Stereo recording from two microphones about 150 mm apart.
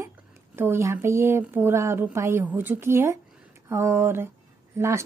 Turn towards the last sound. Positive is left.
turn(degrees=-20)  # may be behind; listen again after turning